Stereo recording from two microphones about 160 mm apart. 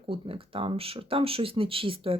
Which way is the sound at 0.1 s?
35° right (ahead or behind).